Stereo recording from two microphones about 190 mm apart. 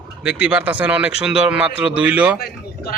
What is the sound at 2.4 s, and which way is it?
Speech, 55° left (ahead or behind).